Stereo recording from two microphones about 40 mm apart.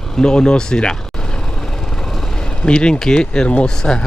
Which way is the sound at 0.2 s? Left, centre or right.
Centre.